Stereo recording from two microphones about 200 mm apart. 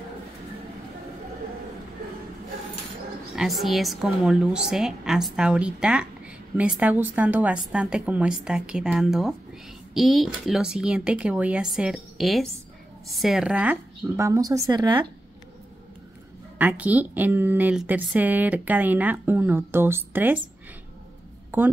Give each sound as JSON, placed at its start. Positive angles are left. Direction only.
{"t": 3.3, "sound": "a woman's voice", "side_deg": 0}
{"t": 16.5, "sound": "speech", "side_deg": -5}
{"t": 21.5, "sound": "a woman's voice", "side_deg": -10}